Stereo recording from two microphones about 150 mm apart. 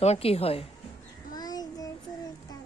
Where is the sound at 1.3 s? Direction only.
25° left (ahead or behind).